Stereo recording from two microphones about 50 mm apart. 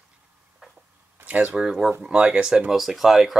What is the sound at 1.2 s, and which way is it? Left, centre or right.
Speech, right.